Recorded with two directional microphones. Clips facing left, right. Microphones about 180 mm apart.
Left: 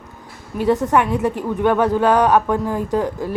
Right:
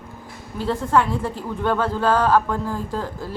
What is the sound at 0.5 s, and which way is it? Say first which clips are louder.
A woman's voice: left 4 dB; 15° left (ahead or behind).